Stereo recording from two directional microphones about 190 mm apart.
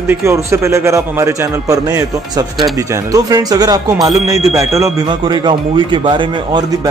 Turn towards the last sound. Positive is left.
turn(degrees=-25)  # may be behind; listen again after turning